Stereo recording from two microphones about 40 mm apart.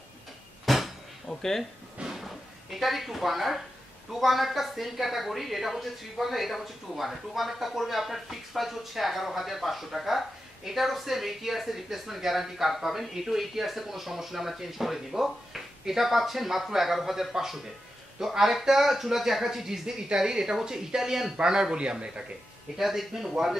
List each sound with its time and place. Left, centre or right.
0.7 s cupboard open or close: centre
1.2 s speech: centre
2.0 s a sound: centre
4.1 s speech: centre; by 21.9 s right
22.8 s speech: centre